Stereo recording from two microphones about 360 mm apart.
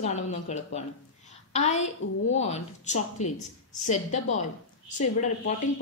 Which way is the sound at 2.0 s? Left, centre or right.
Left.